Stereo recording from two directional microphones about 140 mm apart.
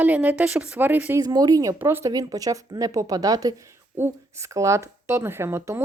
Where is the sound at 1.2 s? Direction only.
30° right (ahead or behind).